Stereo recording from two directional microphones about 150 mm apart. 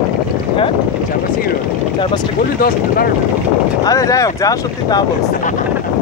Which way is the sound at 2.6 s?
80° left.